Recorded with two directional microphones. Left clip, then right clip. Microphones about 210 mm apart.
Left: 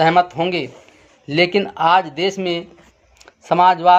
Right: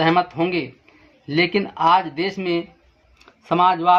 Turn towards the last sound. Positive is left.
turn(degrees=40)  # may be behind; listen again after turning